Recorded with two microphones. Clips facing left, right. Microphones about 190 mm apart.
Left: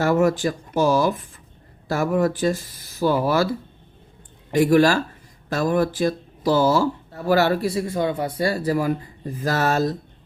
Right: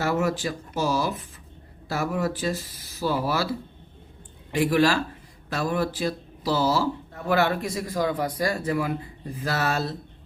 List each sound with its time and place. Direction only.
0.0 s speech: 50° left (ahead or behind)
4.5 s speech: 45° left (ahead or behind)